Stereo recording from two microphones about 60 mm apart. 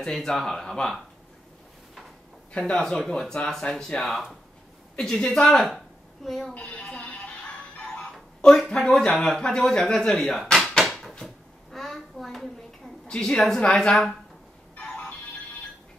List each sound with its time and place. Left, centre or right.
0.0 s speech: centre
2.5 s speech: centre
6.5 s speech: left
7.7 s music: centre
8.5 s speech: centre
10.5 s drawer open or close: centre
11.2 s a sound: centre
13.2 s speech: centre